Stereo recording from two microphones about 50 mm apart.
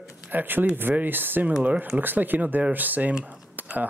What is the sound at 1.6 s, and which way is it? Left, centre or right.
Speech, right.